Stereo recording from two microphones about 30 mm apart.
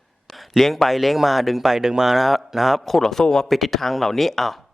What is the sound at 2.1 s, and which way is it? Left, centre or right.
Speech, centre.